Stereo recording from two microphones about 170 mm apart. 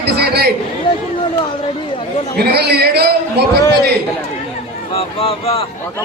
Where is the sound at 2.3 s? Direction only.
70° right (ahead or behind).